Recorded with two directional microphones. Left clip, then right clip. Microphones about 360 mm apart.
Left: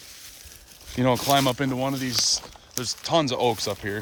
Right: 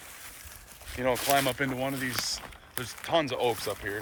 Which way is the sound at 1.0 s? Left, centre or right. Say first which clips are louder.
Left 5 dB; centre.